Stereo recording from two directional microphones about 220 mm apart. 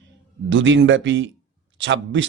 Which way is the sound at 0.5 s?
55° right (ahead or behind).